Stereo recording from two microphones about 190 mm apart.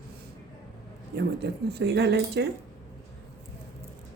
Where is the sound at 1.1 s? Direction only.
60° right (ahead or behind).